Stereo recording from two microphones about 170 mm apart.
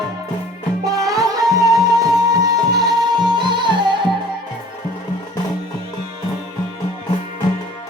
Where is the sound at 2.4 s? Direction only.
20° right (ahead or behind).